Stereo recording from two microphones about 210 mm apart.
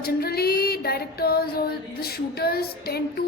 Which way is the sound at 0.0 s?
45° left (ahead or behind).